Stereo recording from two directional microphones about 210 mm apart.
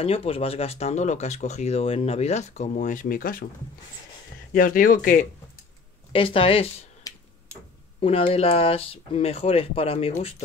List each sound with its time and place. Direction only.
0.0 s speech: 25° left (ahead or behind)
4.6 s speech: 40° left (ahead or behind)
6.1 s speech: 25° left (ahead or behind)
8.0 s speech: 25° left (ahead or behind)